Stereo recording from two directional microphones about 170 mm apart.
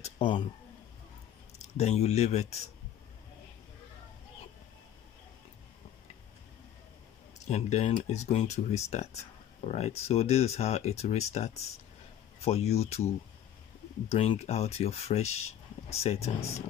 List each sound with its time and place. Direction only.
0.0 s a sound: 30° left (ahead or behind)
1.8 s speech: 40° left (ahead or behind)
7.4 s speech: 40° left (ahead or behind)